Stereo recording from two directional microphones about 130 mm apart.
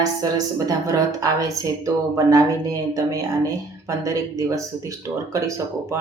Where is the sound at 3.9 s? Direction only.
25° right (ahead or behind).